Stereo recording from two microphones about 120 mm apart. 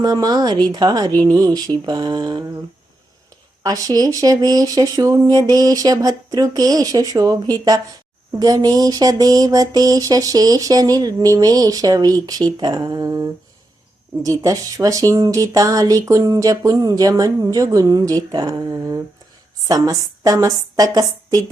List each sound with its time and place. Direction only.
0.0 s speech: 35° right (ahead or behind)
3.6 s speech: 30° right (ahead or behind)